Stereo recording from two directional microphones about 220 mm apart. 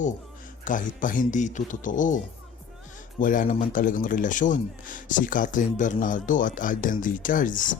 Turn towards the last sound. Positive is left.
turn(degrees=35)  # may be behind; listen again after turning